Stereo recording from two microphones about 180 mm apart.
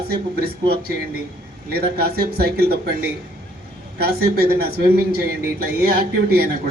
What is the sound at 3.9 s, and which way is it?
Speech, 60° right (ahead or behind).